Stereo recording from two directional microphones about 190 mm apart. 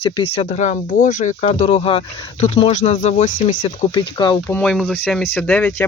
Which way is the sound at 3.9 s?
25° left (ahead or behind).